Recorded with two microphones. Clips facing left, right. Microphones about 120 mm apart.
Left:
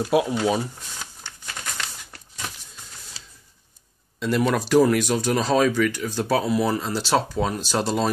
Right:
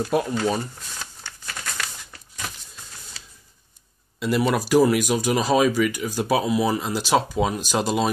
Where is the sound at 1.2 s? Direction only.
20° left (ahead or behind).